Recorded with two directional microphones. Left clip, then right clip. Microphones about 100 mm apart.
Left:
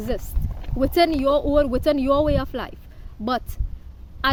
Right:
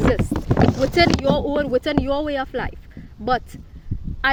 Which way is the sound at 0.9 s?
40° left (ahead or behind).